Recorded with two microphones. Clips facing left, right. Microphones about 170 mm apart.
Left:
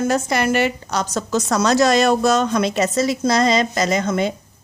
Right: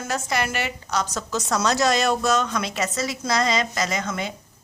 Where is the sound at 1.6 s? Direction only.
75° left (ahead or behind).